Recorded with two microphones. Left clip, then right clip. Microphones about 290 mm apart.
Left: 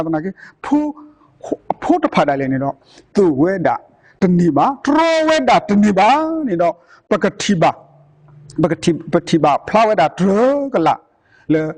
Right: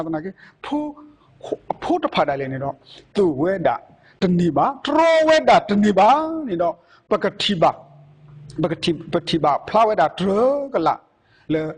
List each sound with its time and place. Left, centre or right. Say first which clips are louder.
0.0 s a man's voice: left 6 dB; left